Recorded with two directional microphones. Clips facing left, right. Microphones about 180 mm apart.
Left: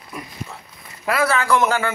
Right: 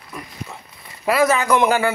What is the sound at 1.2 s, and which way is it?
Speech, 15° right (ahead or behind).